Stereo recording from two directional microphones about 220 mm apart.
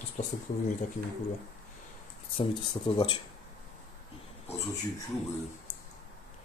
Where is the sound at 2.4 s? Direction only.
25° left (ahead or behind).